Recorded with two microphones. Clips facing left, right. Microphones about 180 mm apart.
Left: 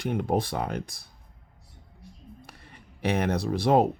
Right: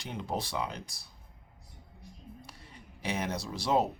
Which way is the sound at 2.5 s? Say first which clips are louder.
Left 1 dB; 60° left (ahead or behind).